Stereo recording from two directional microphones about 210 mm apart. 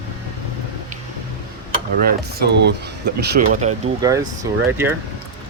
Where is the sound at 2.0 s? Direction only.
50° right (ahead or behind).